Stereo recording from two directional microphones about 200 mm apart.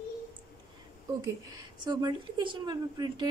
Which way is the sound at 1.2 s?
20° right (ahead or behind).